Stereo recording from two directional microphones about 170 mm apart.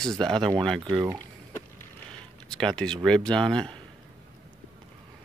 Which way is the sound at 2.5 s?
5° left (ahead or behind).